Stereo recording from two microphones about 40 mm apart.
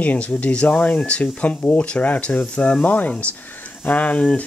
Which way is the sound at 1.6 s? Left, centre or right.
Left.